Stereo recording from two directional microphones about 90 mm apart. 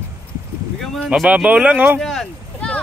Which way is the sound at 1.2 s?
15° right (ahead or behind).